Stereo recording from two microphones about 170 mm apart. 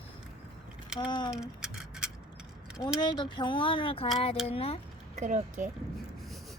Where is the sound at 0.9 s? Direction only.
25° left (ahead or behind).